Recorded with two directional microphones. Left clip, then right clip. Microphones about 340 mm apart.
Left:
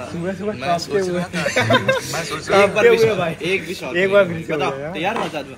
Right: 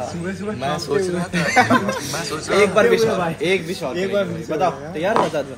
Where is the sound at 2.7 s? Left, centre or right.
Centre.